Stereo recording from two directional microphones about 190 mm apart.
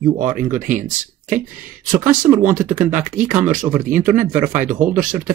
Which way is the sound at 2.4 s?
45° right (ahead or behind).